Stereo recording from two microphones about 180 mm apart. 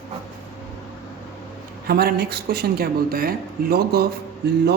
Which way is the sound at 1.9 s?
60° right (ahead or behind).